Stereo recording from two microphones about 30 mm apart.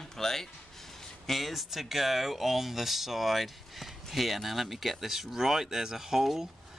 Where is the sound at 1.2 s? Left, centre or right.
Centre.